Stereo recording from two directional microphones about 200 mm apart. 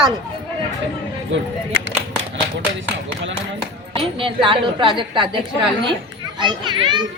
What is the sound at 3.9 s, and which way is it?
Speech, 25° right (ahead or behind).